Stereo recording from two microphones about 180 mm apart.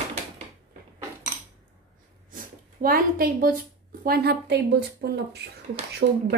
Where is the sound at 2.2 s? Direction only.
50° right (ahead or behind).